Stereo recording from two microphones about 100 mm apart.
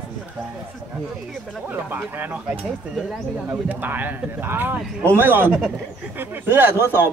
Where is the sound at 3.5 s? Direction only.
20° right (ahead or behind).